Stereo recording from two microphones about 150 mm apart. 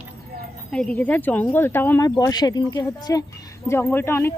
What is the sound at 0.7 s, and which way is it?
A woman's voice, 5° left (ahead or behind).